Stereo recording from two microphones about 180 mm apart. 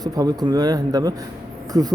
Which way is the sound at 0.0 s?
20° right (ahead or behind).